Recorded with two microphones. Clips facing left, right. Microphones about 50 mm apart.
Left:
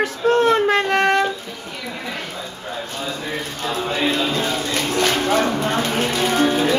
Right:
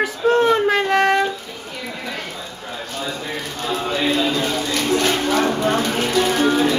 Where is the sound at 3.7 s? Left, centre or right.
Left.